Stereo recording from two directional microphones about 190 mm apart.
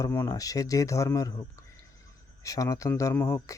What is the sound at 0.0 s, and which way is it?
Speech, 15° left (ahead or behind).